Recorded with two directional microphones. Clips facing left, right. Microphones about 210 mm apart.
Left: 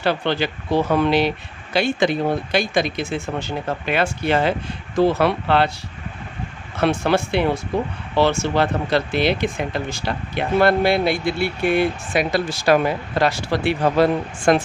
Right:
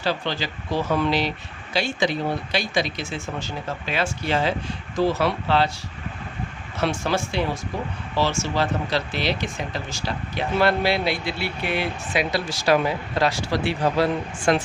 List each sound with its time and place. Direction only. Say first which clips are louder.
0.0 s speech: left 5 dB; 60° left (ahead or behind)
6.7 s speech: left 5 dB; 60° left (ahead or behind)